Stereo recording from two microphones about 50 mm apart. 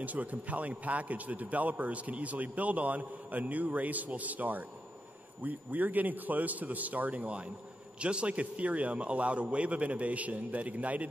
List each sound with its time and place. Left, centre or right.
0.0 s a man's voice: right